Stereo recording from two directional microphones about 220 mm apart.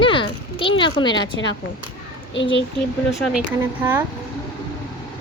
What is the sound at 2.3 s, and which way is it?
Speech, 55° left (ahead or behind).